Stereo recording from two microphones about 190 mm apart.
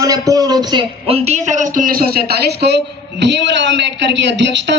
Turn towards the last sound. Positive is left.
turn(degrees=-70)  # may be behind; listen again after turning